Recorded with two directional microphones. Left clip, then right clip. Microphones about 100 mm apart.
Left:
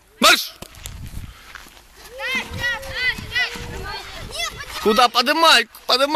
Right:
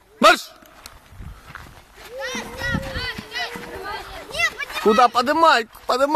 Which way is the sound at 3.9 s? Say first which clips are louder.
Right 1 dB; 20° left (ahead or behind).